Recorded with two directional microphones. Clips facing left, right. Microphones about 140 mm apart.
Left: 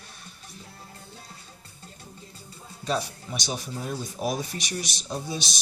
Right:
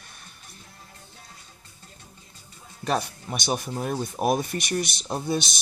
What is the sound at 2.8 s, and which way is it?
Speech, 55° right (ahead or behind).